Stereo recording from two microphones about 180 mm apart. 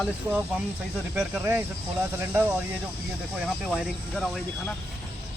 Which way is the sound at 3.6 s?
5° right (ahead or behind).